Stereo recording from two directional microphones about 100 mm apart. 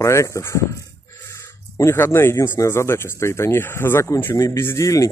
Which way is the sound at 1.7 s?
25° left (ahead or behind).